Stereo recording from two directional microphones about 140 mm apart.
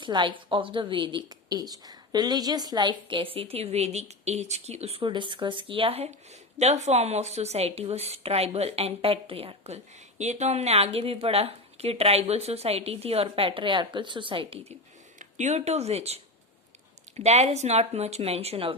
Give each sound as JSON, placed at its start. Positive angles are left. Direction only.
{"t": 0.0, "sound": "a woman's voice", "side_deg": -35}
{"t": 15.2, "sound": "a woman's voice", "side_deg": -60}